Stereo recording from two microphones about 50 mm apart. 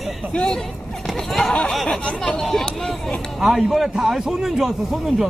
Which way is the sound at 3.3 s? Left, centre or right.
Centre.